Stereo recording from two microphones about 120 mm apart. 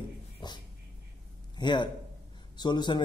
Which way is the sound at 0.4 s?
40° left (ahead or behind).